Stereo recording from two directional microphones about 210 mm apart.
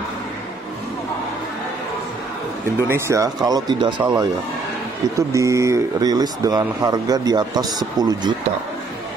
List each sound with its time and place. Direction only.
2.9 s speech: 15° right (ahead or behind)
5.3 s speech: 15° right (ahead or behind)